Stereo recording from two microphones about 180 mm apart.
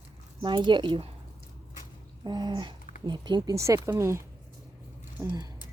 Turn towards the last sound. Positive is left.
turn(degrees=-20)  # may be behind; listen again after turning